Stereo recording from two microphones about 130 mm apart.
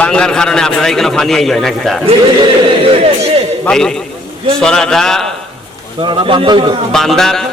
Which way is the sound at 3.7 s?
5° left (ahead or behind).